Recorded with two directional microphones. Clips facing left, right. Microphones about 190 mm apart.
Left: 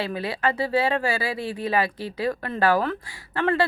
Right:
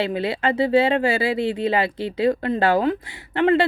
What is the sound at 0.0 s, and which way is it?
Speech, 25° right (ahead or behind).